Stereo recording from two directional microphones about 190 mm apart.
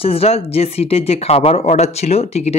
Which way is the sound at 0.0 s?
30° left (ahead or behind).